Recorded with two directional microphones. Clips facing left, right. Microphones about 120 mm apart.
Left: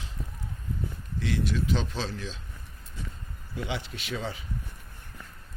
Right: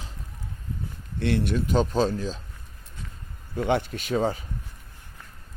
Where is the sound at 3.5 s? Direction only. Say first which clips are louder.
Right 10 dB; 50° right (ahead or behind).